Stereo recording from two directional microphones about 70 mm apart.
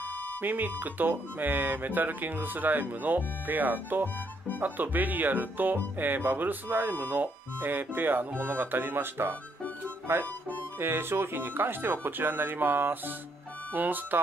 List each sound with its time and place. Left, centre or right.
0.4 s speech: right